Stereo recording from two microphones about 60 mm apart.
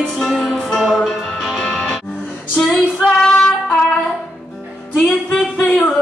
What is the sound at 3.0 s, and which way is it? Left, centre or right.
Female singing, centre.